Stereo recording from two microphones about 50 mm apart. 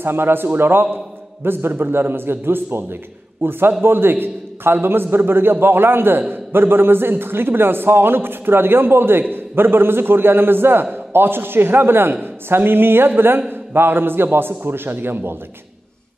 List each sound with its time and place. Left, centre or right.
0.0 s a man's voice: right